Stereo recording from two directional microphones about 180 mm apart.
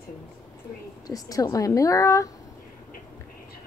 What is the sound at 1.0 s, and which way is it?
A woman's voice, 20° left (ahead or behind).